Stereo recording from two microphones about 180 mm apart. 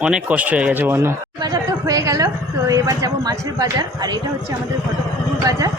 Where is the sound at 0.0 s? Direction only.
5° right (ahead or behind).